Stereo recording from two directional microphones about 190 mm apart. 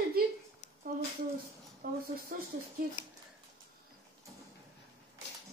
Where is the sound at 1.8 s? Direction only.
50° right (ahead or behind).